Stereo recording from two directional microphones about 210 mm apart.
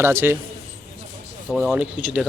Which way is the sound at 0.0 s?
10° right (ahead or behind).